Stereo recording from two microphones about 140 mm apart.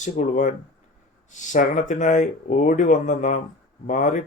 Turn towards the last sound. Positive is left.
turn(degrees=60)  # may be behind; listen again after turning